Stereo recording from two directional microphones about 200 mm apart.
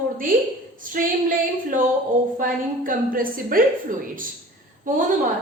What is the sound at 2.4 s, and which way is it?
A woman's voice, 45° right (ahead or behind).